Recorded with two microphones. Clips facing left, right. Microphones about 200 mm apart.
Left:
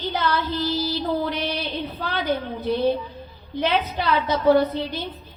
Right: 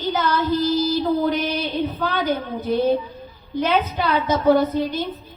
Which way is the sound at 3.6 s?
45° right (ahead or behind).